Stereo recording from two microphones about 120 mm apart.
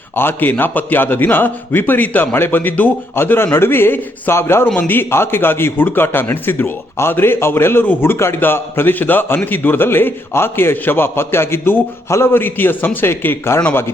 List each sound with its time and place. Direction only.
0.2 s a man's voice: 20° left (ahead or behind)